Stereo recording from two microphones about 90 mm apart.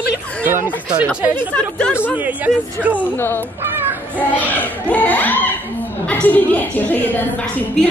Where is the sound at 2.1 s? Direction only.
15° right (ahead or behind).